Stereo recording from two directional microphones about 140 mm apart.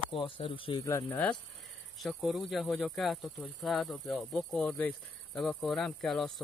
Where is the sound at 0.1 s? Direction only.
40° left (ahead or behind).